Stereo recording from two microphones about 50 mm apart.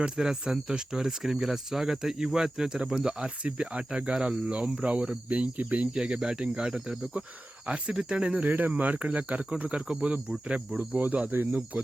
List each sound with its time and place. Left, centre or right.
0.0 s speech: centre
7.7 s cricket: right
8.4 s speech: right
9.6 s cricket: right